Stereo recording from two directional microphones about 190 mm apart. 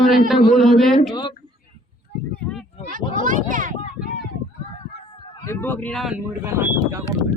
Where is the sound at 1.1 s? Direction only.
20° left (ahead or behind).